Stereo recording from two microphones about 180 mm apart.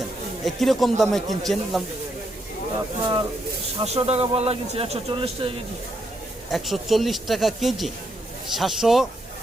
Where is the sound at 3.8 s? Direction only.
30° right (ahead or behind).